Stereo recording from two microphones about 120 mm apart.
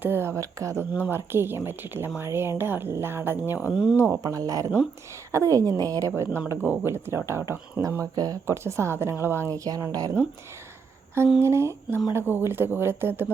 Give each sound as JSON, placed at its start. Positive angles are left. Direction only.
{"t": 0.0, "sound": "speech", "side_deg": -20}
{"t": 4.2, "sound": "speech", "side_deg": -30}
{"t": 11.4, "sound": "speech", "side_deg": -20}